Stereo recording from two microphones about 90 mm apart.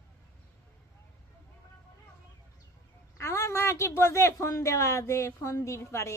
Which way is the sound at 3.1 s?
30° left (ahead or behind).